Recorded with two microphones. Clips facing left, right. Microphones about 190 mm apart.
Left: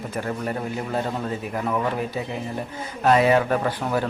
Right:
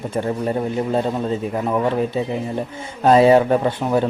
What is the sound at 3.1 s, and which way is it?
A man's voice, 30° right (ahead or behind).